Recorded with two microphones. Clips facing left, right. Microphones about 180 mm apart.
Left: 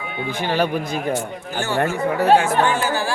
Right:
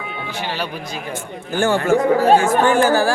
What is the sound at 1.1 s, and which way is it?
Speech, 50° right (ahead or behind).